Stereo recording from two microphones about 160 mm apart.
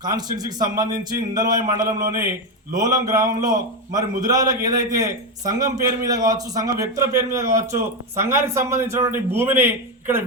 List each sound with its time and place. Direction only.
0.0 s a man's voice: 25° right (ahead or behind)